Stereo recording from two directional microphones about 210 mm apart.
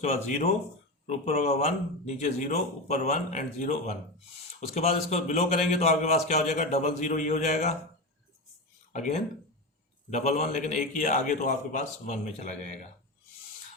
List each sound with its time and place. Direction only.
0.0 s a man's voice: 30° left (ahead or behind)
8.9 s a man's voice: 35° left (ahead or behind)